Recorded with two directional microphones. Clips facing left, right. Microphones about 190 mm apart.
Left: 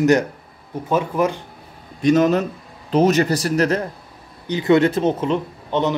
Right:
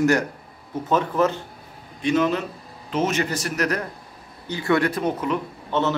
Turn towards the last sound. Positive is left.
turn(degrees=20)  # may be behind; listen again after turning